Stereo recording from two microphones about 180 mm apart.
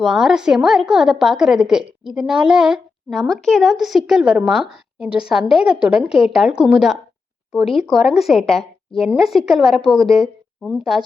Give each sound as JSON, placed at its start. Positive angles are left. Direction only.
{"t": 0.0, "sound": "a woman's voice", "side_deg": 0}